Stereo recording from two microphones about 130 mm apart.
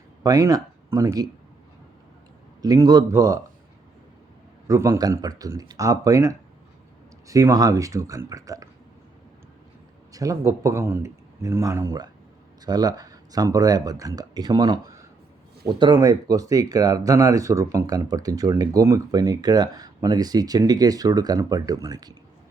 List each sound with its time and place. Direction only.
0.2 s speech: 30° right (ahead or behind)
2.6 s speech: 30° right (ahead or behind)
4.7 s speech: 25° right (ahead or behind)
10.1 s speech: 25° right (ahead or behind)